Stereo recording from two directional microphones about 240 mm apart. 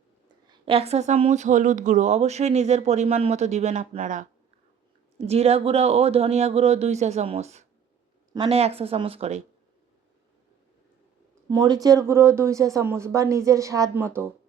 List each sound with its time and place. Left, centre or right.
0.4 s speech: right
11.4 s speech: centre